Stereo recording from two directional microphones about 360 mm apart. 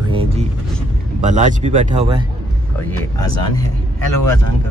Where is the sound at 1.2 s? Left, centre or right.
Centre.